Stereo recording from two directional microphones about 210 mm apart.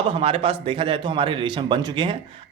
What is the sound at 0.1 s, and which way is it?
A man's voice, 25° right (ahead or behind).